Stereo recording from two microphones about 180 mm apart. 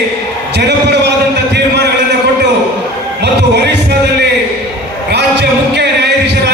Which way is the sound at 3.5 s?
70° right (ahead or behind).